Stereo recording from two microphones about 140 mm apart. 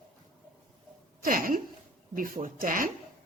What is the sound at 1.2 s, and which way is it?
A woman's voice, 80° right.